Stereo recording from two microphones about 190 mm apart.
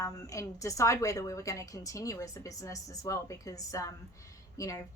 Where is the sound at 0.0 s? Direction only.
15° left (ahead or behind).